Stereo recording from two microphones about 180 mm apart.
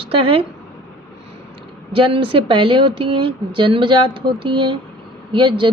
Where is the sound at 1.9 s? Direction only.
30° right (ahead or behind).